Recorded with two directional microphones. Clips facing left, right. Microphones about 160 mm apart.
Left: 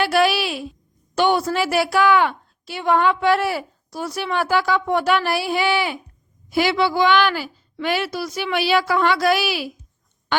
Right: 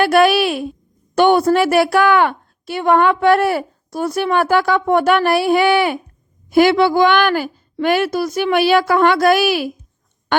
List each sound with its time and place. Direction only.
0.0 s a woman's voice: 55° right (ahead or behind)